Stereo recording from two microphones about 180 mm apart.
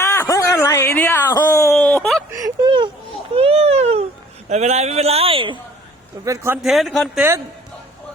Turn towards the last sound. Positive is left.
turn(degrees=0)  # may be behind; listen again after turning